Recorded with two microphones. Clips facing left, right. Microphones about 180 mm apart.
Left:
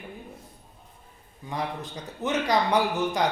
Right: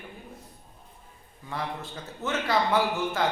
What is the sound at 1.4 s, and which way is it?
Speech, 15° left (ahead or behind).